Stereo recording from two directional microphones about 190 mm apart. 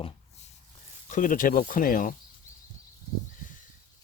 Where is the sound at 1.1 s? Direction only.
45° left (ahead or behind).